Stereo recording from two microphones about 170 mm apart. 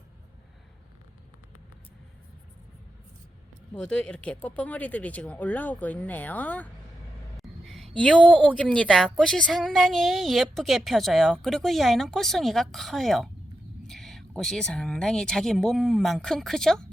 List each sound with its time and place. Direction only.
3.8 s speech: 5° left (ahead or behind)
7.3 s a sound: centre (ahead or behind)
7.9 s a woman's voice: 5° left (ahead or behind)